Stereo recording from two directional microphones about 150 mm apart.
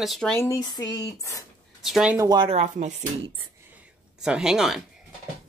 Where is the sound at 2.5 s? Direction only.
45° right (ahead or behind).